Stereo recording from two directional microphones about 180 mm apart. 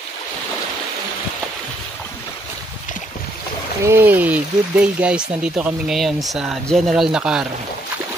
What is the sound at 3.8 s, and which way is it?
Speech, 10° right (ahead or behind).